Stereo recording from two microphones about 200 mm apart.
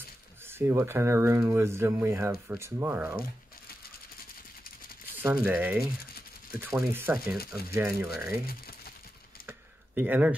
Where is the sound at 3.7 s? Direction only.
50° left (ahead or behind).